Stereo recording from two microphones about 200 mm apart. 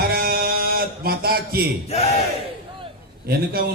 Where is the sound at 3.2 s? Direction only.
50° right (ahead or behind).